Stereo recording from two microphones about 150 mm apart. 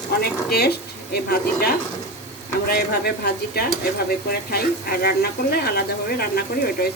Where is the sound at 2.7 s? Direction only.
90° left.